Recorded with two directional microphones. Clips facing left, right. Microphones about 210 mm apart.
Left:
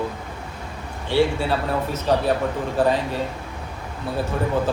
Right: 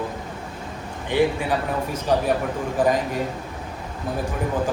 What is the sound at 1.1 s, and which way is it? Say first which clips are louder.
A man's voice: left 1 dB; 15° right (ahead or behind).